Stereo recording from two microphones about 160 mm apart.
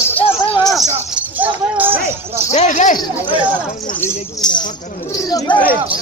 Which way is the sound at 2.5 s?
45° left (ahead or behind).